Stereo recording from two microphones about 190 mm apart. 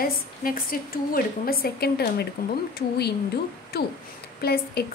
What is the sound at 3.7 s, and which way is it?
Speech, 55° left (ahead or behind).